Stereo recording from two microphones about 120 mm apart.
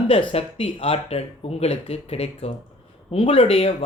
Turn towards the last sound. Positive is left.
turn(degrees=55)  # may be behind; listen again after turning